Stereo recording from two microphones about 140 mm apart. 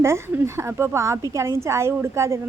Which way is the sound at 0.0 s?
20° right (ahead or behind).